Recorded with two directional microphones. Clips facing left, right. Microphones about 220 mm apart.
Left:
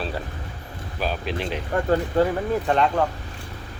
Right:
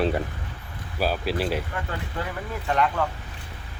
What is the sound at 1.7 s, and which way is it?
Speech, 45° left (ahead or behind).